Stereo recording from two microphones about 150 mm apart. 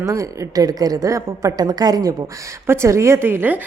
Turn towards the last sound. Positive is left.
turn(degrees=-10)  # may be behind; listen again after turning